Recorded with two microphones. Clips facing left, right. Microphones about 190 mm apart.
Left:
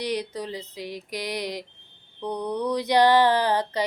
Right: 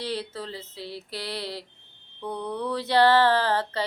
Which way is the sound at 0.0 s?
15° left (ahead or behind).